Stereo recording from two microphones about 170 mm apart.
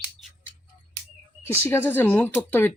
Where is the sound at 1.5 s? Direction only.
15° left (ahead or behind).